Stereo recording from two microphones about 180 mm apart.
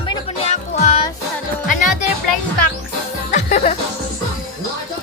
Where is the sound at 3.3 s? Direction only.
40° left (ahead or behind).